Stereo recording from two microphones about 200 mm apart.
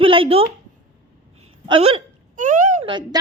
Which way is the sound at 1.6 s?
25° right (ahead or behind).